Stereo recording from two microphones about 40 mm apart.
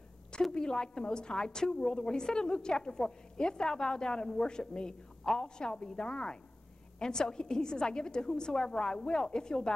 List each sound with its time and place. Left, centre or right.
0.3 s a woman's voice: centre